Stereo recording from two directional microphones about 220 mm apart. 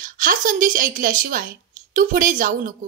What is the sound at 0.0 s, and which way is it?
A woman's voice, 40° right (ahead or behind).